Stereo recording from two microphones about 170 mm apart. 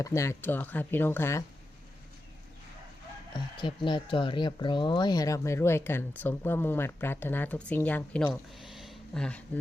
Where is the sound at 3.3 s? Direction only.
25° left (ahead or behind).